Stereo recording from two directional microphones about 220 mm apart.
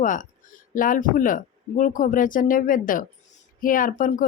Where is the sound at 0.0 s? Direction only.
35° left (ahead or behind).